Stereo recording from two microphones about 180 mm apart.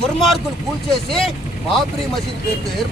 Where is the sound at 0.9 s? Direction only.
Centre (ahead or behind).